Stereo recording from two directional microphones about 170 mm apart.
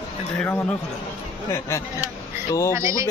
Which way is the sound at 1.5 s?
15° left (ahead or behind).